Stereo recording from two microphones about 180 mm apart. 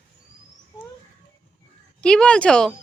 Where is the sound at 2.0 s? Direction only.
5° left (ahead or behind).